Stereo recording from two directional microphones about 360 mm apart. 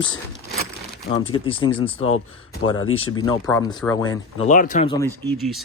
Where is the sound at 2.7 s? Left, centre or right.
Left.